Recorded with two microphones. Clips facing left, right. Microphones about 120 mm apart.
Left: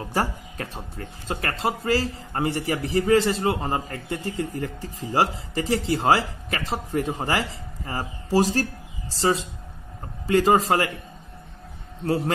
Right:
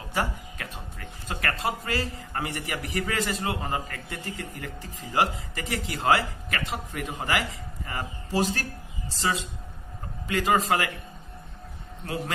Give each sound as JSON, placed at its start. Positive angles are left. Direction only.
{"t": 0.1, "sound": "music", "side_deg": 40}
{"t": 1.2, "sound": "a man's voice", "side_deg": 25}